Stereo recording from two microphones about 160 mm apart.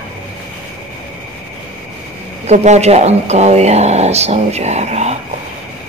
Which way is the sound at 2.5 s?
45° right (ahead or behind).